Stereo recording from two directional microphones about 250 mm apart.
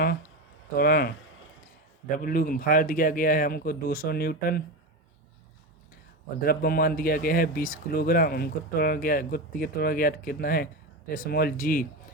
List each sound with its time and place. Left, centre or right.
0.8 s speech: left
6.4 s speech: left